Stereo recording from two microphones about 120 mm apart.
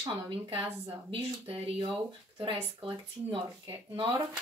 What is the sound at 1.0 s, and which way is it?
Speech, 50° right (ahead or behind).